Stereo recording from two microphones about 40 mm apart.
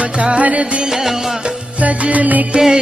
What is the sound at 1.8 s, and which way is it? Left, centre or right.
Music, right.